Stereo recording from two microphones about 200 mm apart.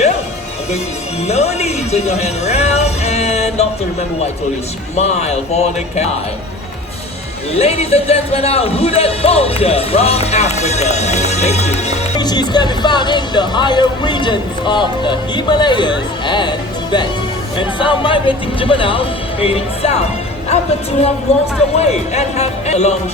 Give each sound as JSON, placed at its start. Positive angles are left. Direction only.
{"t": 1.3, "sound": "speech", "side_deg": 35}
{"t": 4.9, "sound": "speech", "side_deg": 35}
{"t": 7.5, "sound": "speech", "side_deg": 30}
{"t": 12.2, "sound": "speech", "side_deg": 20}